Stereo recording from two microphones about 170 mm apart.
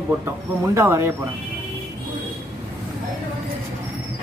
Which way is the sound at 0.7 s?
15° right (ahead or behind).